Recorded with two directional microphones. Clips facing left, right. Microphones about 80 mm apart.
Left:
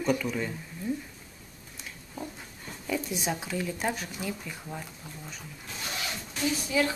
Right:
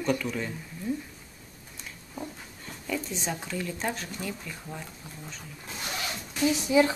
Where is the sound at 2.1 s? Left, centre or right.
Centre.